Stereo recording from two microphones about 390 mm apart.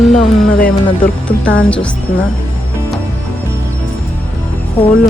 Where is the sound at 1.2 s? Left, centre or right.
Centre.